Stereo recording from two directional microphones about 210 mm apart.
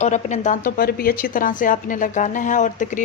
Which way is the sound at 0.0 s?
35° left (ahead or behind).